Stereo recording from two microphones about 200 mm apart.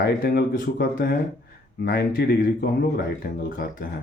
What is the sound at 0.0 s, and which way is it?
Speech, 50° left (ahead or behind).